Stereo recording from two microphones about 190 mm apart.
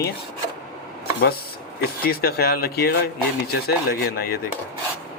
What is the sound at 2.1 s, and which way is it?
Speech, 55° left (ahead or behind).